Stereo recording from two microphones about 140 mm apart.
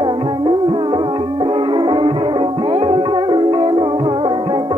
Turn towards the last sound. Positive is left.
turn(degrees=-35)  # may be behind; listen again after turning